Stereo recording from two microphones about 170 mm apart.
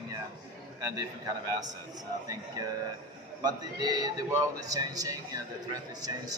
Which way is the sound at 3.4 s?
25° right (ahead or behind).